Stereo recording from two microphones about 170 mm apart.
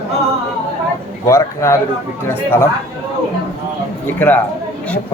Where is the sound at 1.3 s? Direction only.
15° left (ahead or behind).